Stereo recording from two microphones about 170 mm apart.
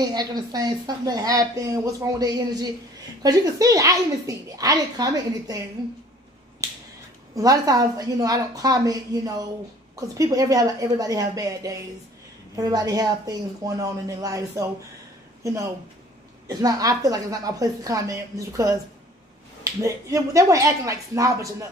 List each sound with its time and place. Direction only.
0.0 s speech: 25° right (ahead or behind)
7.3 s speech: 20° right (ahead or behind)